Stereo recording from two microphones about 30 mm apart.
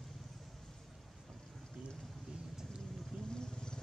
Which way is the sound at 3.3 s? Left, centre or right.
Left.